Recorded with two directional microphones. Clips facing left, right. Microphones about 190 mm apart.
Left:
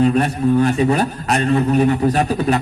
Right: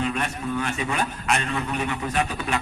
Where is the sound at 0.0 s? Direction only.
40° left (ahead or behind).